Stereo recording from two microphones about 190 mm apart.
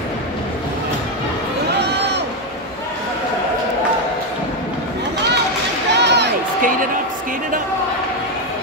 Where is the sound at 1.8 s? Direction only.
60° right (ahead or behind).